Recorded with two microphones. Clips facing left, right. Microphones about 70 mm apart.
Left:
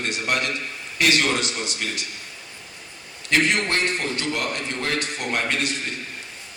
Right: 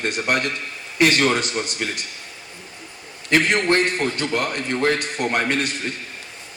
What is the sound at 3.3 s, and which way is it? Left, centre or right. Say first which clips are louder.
A man's voice: right 3 dB; right.